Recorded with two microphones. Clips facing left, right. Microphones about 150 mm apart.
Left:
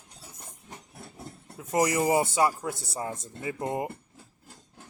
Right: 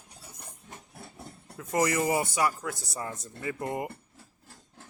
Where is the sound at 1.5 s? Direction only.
20° left (ahead or behind).